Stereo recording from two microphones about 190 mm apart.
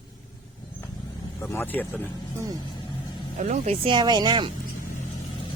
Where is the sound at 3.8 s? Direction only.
25° right (ahead or behind).